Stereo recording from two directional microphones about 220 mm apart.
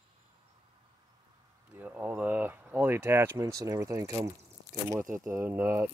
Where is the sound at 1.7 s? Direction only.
5° right (ahead or behind).